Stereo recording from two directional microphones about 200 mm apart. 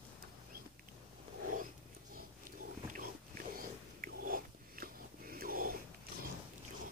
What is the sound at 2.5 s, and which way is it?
Dog, 40° right (ahead or behind).